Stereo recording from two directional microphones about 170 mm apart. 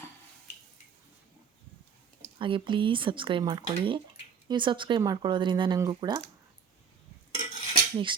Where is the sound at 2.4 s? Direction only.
30° right (ahead or behind).